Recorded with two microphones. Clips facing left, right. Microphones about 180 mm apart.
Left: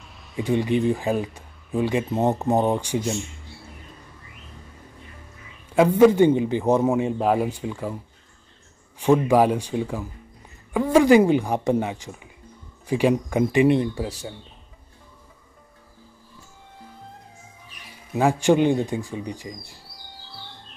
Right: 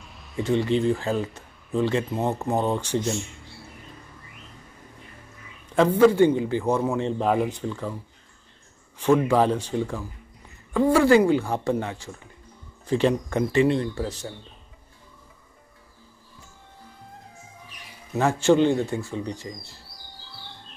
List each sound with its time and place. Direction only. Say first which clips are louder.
0.0 s a sound: even; centre (ahead or behind)
0.4 s speech: left 1 dB; 15° left (ahead or behind)
5.9 s speech: left 2 dB; 15° left (ahead or behind)
18.1 s speech: left 1 dB; 15° left (ahead or behind)